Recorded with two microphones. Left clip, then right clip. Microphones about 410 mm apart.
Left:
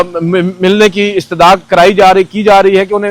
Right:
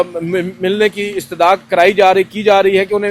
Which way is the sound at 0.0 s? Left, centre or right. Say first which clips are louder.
Left 5 dB; left.